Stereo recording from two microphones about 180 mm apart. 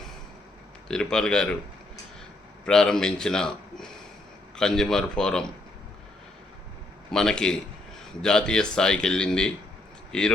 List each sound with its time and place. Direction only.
0.9 s speech: 5° left (ahead or behind)
2.6 s speech: 5° left (ahead or behind)
7.1 s speech: 5° left (ahead or behind)